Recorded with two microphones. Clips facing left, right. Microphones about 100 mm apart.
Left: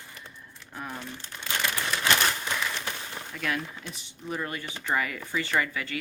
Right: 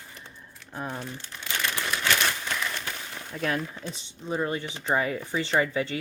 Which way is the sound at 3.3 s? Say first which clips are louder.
Right 3 dB; 35° right (ahead or behind).